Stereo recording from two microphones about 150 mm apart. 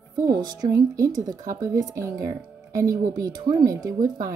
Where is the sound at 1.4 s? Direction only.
20° right (ahead or behind).